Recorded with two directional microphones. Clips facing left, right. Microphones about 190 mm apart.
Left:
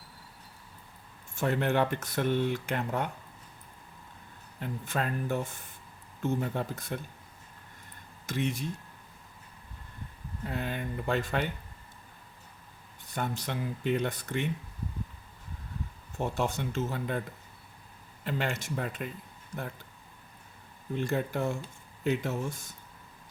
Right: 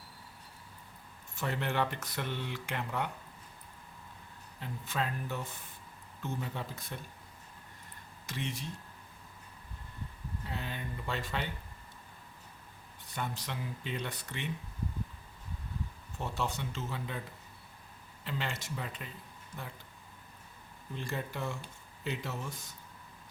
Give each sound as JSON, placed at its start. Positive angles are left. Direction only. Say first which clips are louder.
{"t": 1.4, "sound": "speech", "louder": "left 6 dB", "side_deg": 50}
{"t": 4.6, "sound": "speech", "louder": "left 4 dB", "side_deg": 50}
{"t": 8.3, "sound": "speech", "louder": "left 8 dB", "side_deg": 50}
{"t": 10.4, "sound": "speech", "louder": "left 7 dB", "side_deg": 55}
{"t": 13.1, "sound": "speech", "louder": "left 5 dB", "side_deg": 50}
{"t": 16.1, "sound": "speech", "louder": "left 6 dB", "side_deg": 50}
{"t": 18.3, "sound": "speech", "louder": "left 6 dB", "side_deg": 50}
{"t": 20.9, "sound": "speech", "louder": "left 8 dB", "side_deg": 50}